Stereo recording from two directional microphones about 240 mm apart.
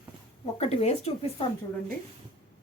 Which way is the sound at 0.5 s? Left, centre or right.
Left.